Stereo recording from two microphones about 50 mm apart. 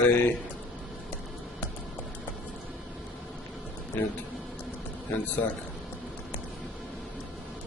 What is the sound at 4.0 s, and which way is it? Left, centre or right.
Speech, left.